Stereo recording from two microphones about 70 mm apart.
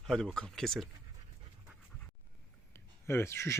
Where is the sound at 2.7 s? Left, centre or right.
Left.